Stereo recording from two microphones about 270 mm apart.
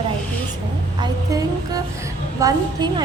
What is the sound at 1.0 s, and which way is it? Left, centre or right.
A woman's voice, centre.